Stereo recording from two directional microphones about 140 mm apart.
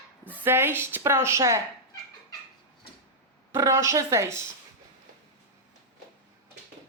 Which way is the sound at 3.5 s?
20° right (ahead or behind).